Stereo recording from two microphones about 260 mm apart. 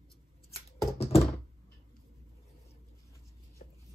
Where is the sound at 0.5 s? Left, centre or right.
Left.